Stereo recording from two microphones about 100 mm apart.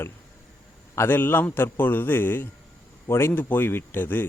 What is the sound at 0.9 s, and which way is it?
A man's voice, 20° left (ahead or behind).